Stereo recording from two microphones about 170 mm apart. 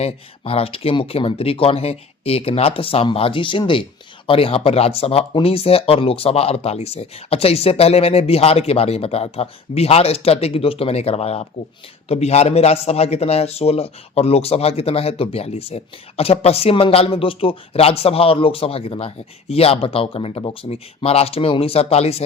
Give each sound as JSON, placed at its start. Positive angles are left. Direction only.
{"t": 0.0, "sound": "a man's voice", "side_deg": 35}